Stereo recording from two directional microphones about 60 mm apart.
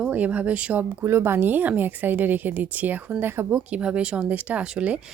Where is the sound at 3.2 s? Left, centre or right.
Right.